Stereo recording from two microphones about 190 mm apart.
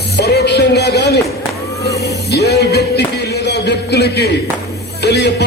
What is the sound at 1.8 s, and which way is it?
Music, 60° left (ahead or behind).